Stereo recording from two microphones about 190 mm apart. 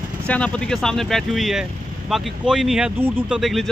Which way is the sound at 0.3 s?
5° left (ahead or behind).